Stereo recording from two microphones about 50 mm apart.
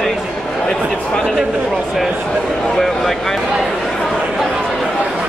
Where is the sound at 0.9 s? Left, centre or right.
Centre.